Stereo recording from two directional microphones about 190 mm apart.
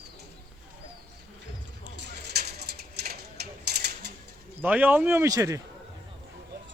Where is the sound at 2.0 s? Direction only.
60° right (ahead or behind).